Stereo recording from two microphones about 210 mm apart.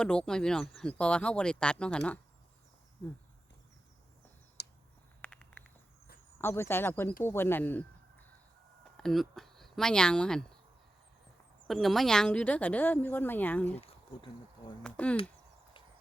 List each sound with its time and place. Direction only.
0.0 s speech: 5° left (ahead or behind)
4.6 s a sound: 50° left (ahead or behind)
5.2 s insect: 5° left (ahead or behind)
6.4 s speech: 10° left (ahead or behind)
11.7 s speech: centre (ahead or behind)
13.7 s insect: 30° left (ahead or behind)
14.8 s speech: 5° left (ahead or behind)